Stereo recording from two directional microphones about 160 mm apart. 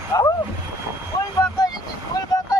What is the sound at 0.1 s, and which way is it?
Speech, 20° left (ahead or behind).